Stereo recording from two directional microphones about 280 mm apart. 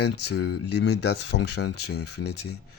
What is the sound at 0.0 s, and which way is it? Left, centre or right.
Speech, left.